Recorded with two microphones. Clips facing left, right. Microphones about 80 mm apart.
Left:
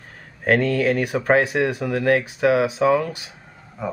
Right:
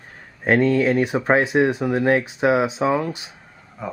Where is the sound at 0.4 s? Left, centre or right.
Right.